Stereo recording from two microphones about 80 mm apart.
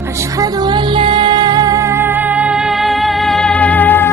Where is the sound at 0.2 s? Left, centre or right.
Right; by 3.5 s centre.